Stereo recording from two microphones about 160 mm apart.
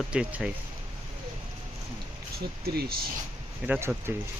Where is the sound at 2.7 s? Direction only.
80° right.